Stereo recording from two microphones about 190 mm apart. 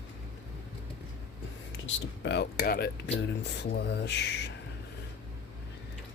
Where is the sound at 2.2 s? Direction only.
60° left (ahead or behind).